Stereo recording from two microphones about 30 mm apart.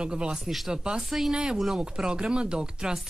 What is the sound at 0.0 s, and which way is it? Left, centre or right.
Speech, right.